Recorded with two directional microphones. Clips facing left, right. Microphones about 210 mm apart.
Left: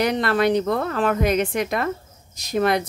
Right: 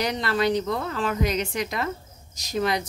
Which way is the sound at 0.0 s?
55° left (ahead or behind).